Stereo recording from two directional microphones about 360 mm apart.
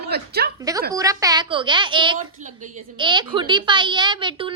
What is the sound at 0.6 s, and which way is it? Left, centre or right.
A woman's voice, centre.